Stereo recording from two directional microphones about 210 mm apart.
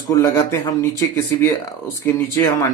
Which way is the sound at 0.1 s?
10° left (ahead or behind).